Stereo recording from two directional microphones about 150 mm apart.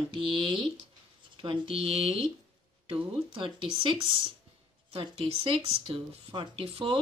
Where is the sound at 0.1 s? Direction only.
35° right (ahead or behind).